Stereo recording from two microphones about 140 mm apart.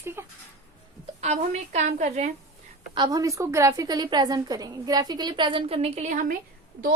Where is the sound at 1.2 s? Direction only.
55° right (ahead or behind).